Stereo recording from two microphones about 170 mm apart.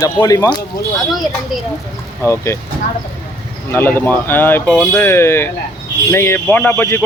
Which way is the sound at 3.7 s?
15° left (ahead or behind).